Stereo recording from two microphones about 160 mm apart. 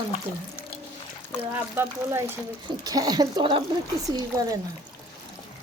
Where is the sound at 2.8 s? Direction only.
25° right (ahead or behind).